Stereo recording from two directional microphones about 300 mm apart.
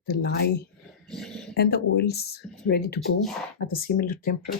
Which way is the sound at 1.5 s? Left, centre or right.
Left.